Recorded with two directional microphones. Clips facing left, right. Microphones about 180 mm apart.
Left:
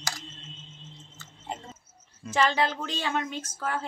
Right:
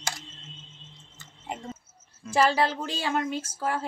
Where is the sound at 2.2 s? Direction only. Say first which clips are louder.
Right 2 dB; 5° right (ahead or behind).